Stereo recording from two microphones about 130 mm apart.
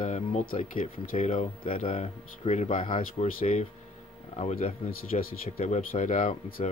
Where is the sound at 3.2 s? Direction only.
85° left.